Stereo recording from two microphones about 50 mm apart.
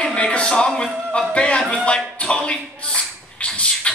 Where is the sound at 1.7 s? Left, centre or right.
Left.